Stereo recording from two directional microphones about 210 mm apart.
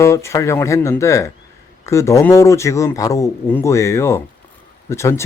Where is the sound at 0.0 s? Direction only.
15° left (ahead or behind).